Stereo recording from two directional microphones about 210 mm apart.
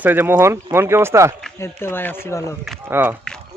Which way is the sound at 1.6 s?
10° left (ahead or behind).